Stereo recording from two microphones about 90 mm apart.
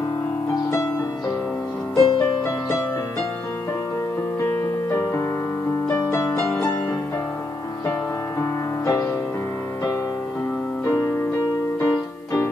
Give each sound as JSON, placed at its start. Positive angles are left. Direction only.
{"t": 2.0, "sound": "music", "side_deg": 55}
{"t": 5.9, "sound": "music", "side_deg": 30}
{"t": 8.4, "sound": "music", "side_deg": 40}
{"t": 11.8, "sound": "keyboard", "side_deg": 35}